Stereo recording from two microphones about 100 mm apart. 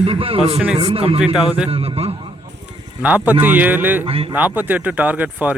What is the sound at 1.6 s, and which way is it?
Speech, 80° right.